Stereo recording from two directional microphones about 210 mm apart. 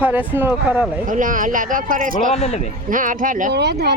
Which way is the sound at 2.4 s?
30° left (ahead or behind).